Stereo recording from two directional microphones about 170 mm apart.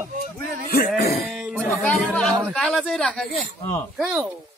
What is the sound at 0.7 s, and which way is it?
Speech, 65° left (ahead or behind).